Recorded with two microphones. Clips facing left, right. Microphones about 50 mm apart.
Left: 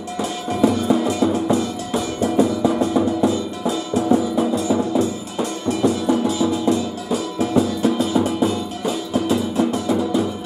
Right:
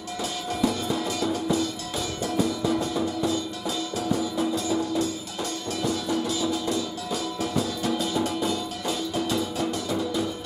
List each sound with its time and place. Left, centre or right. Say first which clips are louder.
0.2 s music: left 8 dB; left